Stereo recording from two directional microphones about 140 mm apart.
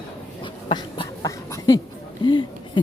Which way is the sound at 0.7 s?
30° left (ahead or behind).